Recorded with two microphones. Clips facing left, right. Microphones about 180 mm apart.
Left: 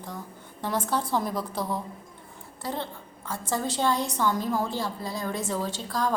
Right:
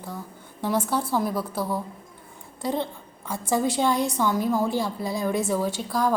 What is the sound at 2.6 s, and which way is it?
A woman's voice, 15° right (ahead or behind).